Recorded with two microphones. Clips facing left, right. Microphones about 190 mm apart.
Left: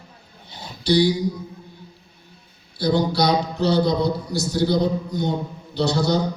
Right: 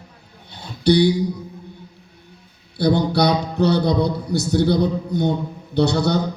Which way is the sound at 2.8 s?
60° right (ahead or behind).